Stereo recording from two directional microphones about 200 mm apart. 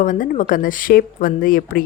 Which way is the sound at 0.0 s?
40° left (ahead or behind).